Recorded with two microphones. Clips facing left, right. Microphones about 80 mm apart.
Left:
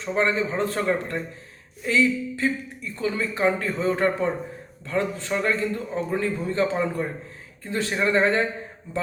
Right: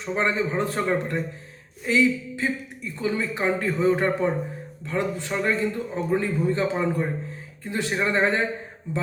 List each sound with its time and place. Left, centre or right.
0.0 s speech: centre